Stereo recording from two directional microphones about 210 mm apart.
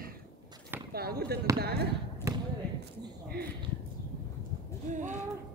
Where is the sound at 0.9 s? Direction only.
45° right (ahead or behind).